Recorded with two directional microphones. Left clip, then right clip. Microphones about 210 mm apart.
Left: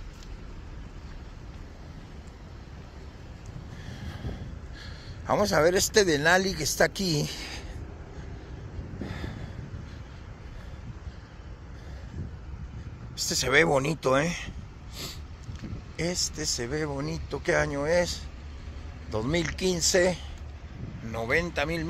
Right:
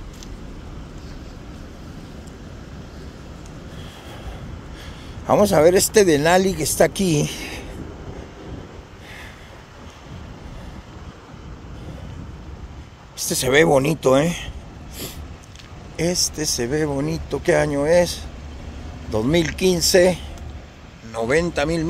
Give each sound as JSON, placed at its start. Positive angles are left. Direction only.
{"t": 5.2, "sound": "speech", "side_deg": -10}
{"t": 13.2, "sound": "speech", "side_deg": -5}
{"t": 16.0, "sound": "speech", "side_deg": -10}
{"t": 21.1, "sound": "speech", "side_deg": -20}